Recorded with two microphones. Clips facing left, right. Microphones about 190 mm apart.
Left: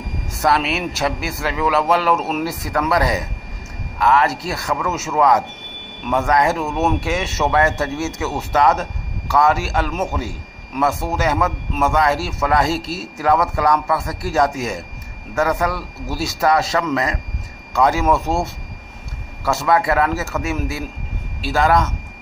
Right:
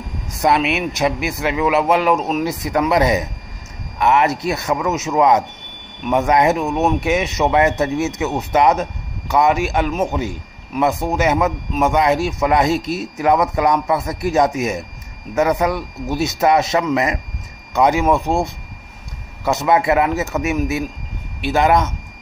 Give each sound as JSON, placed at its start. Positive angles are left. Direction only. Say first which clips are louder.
{"t": 0.4, "sound": "a man's voice", "louder": "right 2 dB", "side_deg": -15}